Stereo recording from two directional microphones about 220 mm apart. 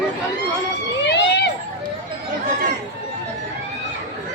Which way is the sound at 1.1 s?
55° left (ahead or behind).